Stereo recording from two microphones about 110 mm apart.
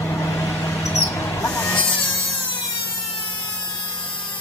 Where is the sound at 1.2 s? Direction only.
30° left (ahead or behind).